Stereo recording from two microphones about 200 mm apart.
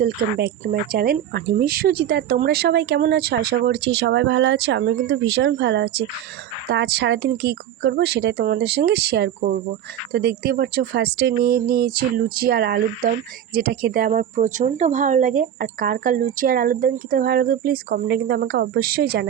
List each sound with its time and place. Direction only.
0.0 s speech: 50° right (ahead or behind)